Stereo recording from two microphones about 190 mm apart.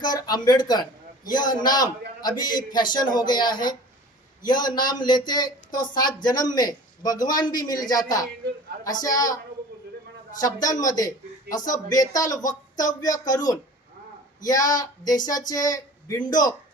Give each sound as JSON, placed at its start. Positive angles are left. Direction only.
{"t": 0.0, "sound": "a man's voice", "side_deg": 20}
{"t": 10.4, "sound": "a man's voice", "side_deg": 20}